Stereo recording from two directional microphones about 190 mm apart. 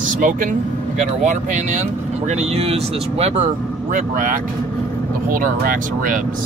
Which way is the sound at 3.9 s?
45° right (ahead or behind).